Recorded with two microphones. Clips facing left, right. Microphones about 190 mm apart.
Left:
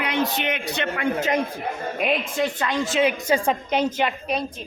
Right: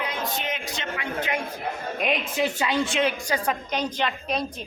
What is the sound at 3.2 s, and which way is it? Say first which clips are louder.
Speech: left 5 dB; 25° left (ahead or behind).